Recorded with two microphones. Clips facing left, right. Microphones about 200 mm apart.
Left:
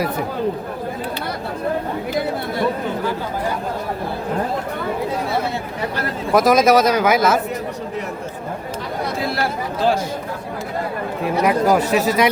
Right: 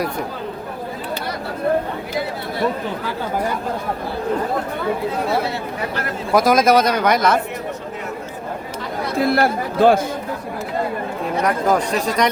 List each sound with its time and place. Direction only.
6.3 s speech: centre (ahead or behind)
9.2 s speech: 55° right (ahead or behind)
11.4 s speech: 5° left (ahead or behind)